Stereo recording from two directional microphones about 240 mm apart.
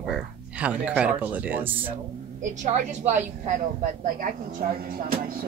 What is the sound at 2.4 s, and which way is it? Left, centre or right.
Speech, right.